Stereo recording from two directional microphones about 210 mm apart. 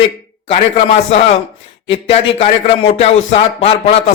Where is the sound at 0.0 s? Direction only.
30° left (ahead or behind).